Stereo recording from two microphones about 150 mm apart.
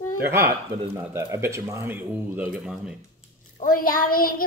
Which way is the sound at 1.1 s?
20° right (ahead or behind).